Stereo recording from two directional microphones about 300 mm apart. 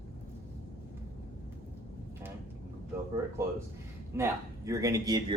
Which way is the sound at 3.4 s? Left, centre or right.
Centre.